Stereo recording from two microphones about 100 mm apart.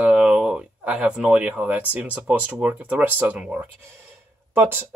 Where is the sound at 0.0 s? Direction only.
10° right (ahead or behind).